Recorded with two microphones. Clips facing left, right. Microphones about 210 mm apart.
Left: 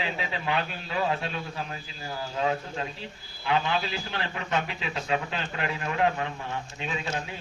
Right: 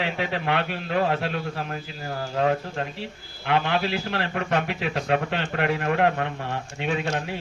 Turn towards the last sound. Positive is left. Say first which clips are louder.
# right 6 dB
turn(degrees=-65)  # may be behind; listen again after turning